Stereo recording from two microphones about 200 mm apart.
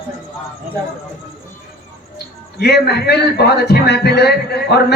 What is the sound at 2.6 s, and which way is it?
A man's voice, 55° left (ahead or behind).